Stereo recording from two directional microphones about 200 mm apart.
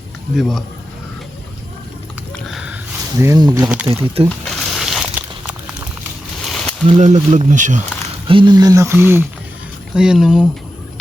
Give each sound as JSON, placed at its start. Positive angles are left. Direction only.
{"t": 0.3, "sound": "speech", "side_deg": 0}
{"t": 2.3, "sound": "sniff", "side_deg": 0}
{"t": 3.2, "sound": "speech", "side_deg": -15}
{"t": 4.3, "sound": "crumpling", "side_deg": 0}
{"t": 6.4, "sound": "a sound", "side_deg": 0}
{"t": 6.8, "sound": "speech", "side_deg": -35}
{"t": 8.3, "sound": "speech", "side_deg": -25}